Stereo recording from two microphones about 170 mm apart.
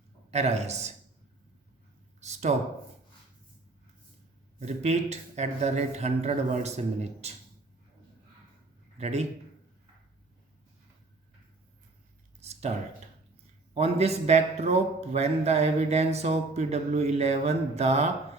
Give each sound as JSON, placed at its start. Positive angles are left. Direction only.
{"t": 0.3, "sound": "a man's voice", "side_deg": -40}
{"t": 2.2, "sound": "speech", "side_deg": -40}
{"t": 4.6, "sound": "a man's voice", "side_deg": -40}
{"t": 9.0, "sound": "a man's voice", "side_deg": -40}
{"t": 12.4, "sound": "a sound", "side_deg": -40}
{"t": 13.7, "sound": "a man's voice", "side_deg": -40}